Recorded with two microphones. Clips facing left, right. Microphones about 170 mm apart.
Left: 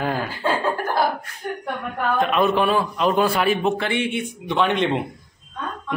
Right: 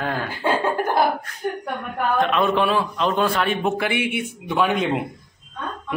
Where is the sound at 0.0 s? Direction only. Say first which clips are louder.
Left 2 dB; 5° left (ahead or behind).